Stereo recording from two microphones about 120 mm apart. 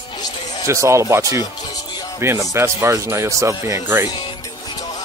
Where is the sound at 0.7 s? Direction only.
25° right (ahead or behind).